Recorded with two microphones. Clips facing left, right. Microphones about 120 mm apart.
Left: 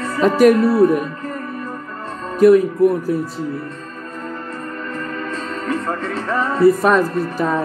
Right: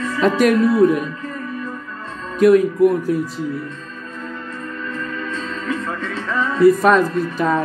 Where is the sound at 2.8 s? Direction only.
35° left (ahead or behind).